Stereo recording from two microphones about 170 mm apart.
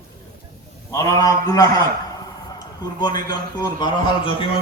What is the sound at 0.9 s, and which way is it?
A man's voice, 20° left (ahead or behind).